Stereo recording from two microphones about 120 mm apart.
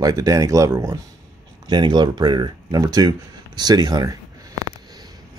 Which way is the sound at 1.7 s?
40° right (ahead or behind).